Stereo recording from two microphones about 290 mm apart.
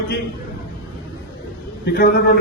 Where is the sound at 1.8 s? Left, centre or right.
Left.